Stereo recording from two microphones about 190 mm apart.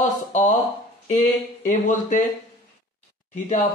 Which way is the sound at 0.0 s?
40° left (ahead or behind).